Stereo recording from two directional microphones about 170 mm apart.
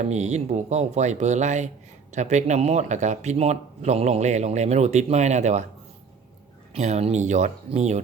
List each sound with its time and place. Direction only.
0.0 s speech: 40° right (ahead or behind)
6.7 s speech: 40° right (ahead or behind)